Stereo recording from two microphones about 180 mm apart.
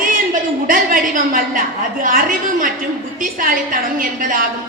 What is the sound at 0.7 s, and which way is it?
A woman's voice, 50° right (ahead or behind).